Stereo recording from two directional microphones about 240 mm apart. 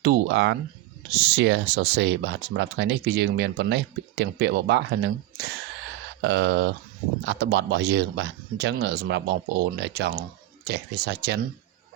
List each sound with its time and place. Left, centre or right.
0.0 s speech: right
6.2 s speech: right